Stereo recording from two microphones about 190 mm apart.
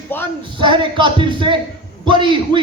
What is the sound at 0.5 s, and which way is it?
A man's voice, 25° right (ahead or behind).